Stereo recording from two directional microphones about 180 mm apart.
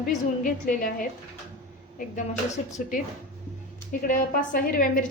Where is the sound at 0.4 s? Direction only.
50° left (ahead or behind).